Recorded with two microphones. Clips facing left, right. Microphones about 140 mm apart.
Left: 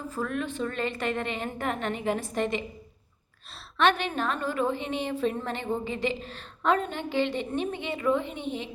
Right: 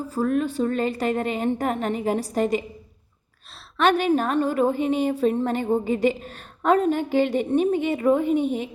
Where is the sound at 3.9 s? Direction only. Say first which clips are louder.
Right 7 dB; 40° right (ahead or behind).